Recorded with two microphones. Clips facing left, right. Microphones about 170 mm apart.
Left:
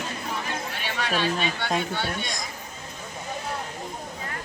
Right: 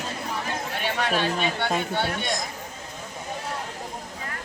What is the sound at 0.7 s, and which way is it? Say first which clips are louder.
Speech: right 4 dB; 50° right (ahead or behind).